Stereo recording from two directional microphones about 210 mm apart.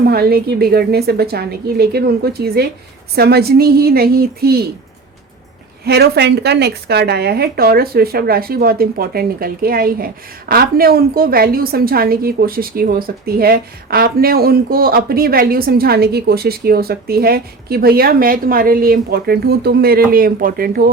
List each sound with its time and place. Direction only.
0.1 s a woman's voice: 45° right (ahead or behind)
5.8 s a woman's voice: 50° right (ahead or behind)